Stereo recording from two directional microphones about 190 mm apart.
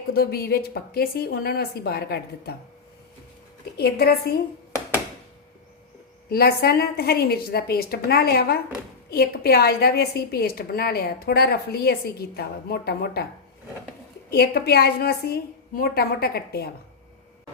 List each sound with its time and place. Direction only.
0.1 s speech: 55° left (ahead or behind)
3.8 s speech: 55° left (ahead or behind)
6.2 s speech: 55° left (ahead or behind)
14.3 s speech: 55° left (ahead or behind)